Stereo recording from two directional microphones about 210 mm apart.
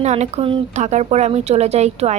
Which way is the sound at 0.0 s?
35° right (ahead or behind).